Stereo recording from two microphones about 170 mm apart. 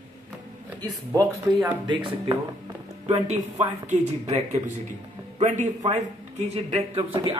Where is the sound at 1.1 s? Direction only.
20° right (ahead or behind).